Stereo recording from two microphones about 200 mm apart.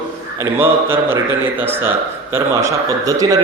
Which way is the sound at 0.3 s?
10° right (ahead or behind).